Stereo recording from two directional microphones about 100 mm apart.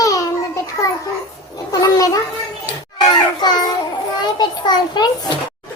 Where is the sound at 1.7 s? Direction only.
35° left (ahead or behind).